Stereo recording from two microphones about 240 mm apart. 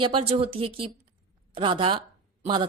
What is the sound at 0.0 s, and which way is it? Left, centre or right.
A woman's voice, right.